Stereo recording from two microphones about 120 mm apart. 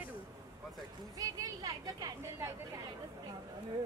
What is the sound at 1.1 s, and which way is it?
A woman's voice, 30° right (ahead or behind).